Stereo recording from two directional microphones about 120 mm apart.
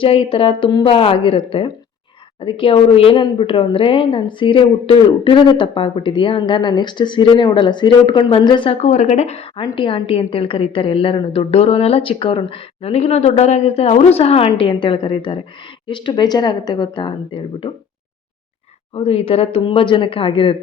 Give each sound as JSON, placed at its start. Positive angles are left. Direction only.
{"t": 0.0, "sound": "a woman's voice", "side_deg": 50}
{"t": 8.7, "sound": "speech", "side_deg": 75}
{"t": 9.7, "sound": "a woman's voice", "side_deg": 45}
{"t": 18.9, "sound": "a woman's voice", "side_deg": 55}